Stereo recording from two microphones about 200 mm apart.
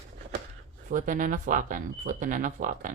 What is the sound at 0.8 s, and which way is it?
Speech, 40° right (ahead or behind).